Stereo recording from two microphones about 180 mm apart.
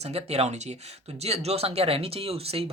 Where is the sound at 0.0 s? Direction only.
35° right (ahead or behind).